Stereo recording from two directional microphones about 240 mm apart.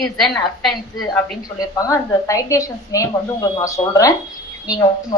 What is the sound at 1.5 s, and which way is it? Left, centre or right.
A woman's voice, centre.